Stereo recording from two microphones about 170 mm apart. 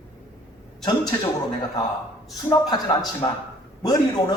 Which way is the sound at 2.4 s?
25° left (ahead or behind).